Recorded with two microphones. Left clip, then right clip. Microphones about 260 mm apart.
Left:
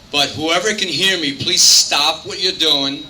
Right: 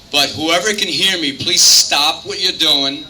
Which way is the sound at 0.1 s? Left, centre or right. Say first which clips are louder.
Right 2 dB; centre.